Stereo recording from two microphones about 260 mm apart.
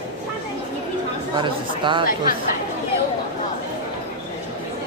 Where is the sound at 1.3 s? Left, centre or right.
Centre.